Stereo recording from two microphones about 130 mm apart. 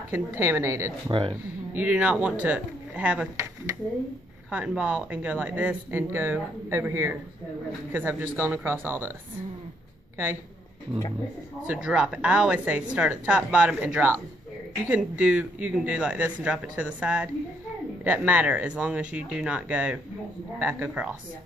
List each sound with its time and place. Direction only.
0.1 s a woman's voice: 15° right (ahead or behind)
1.8 s a woman's voice: 10° right (ahead or behind)
4.5 s a woman's voice: 10° right (ahead or behind)
11.6 s a woman's voice: 10° right (ahead or behind)